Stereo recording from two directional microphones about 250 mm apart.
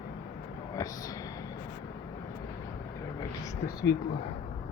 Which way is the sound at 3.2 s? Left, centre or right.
Centre.